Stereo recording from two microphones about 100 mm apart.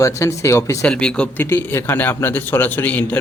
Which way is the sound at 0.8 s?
10° left (ahead or behind).